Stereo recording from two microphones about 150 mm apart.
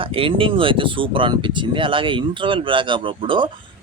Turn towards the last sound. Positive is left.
turn(degrees=-35)  # may be behind; listen again after turning